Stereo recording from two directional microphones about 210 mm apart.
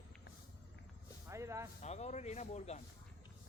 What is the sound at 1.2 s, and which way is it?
Speech, 15° right (ahead or behind).